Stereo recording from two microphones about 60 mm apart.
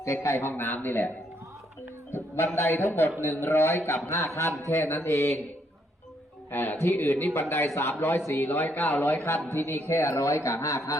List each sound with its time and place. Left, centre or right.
0.0 s a man's voice: left
2.1 s a man's voice: left
6.5 s a man's voice: left